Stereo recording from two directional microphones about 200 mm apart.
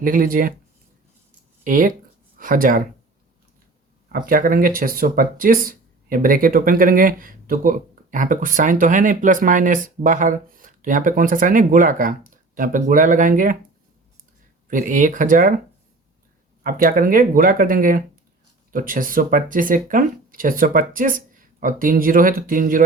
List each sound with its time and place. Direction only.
0.0 s speech: 45° right (ahead or behind)
1.6 s speech: 45° right (ahead or behind)
4.1 s speech: 45° right (ahead or behind)
14.7 s speech: 40° right (ahead or behind)
16.6 s speech: 45° right (ahead or behind)